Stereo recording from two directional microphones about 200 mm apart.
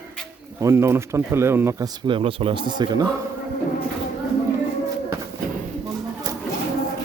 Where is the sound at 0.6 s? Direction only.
15° right (ahead or behind).